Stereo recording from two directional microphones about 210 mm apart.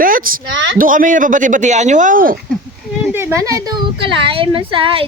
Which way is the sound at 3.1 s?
10° right (ahead or behind).